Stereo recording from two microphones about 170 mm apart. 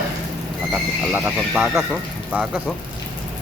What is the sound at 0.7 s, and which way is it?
Speech, 10° right (ahead or behind).